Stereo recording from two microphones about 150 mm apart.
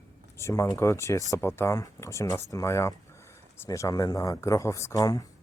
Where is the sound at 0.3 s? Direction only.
20° left (ahead or behind).